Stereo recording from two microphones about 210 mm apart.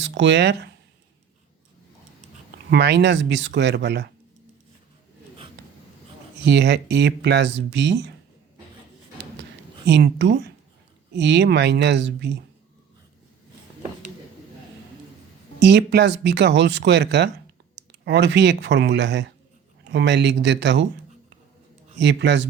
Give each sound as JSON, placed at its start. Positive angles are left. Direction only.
{"t": 0.0, "sound": "speech", "side_deg": -60}
{"t": 2.6, "sound": "speech", "side_deg": -55}
{"t": 6.4, "sound": "speech", "side_deg": -55}
{"t": 9.4, "sound": "a sound", "side_deg": -55}
{"t": 11.1, "sound": "speech", "side_deg": -55}
{"t": 15.6, "sound": "speech", "side_deg": -55}
{"t": 21.9, "sound": "speech", "side_deg": -55}